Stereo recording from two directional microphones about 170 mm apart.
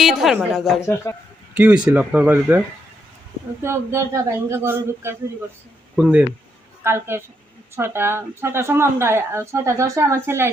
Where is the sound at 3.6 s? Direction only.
15° right (ahead or behind).